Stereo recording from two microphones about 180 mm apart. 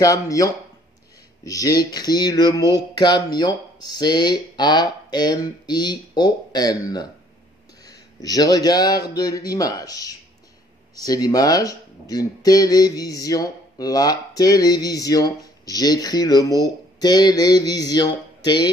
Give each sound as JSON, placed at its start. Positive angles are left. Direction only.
{"t": 0.0, "sound": "speech", "side_deg": 20}